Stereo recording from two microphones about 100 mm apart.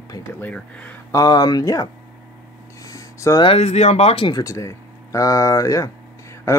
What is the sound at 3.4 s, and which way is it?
Speech, 80° left.